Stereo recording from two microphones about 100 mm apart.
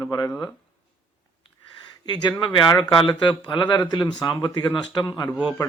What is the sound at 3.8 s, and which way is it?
A man's voice, 50° left (ahead or behind).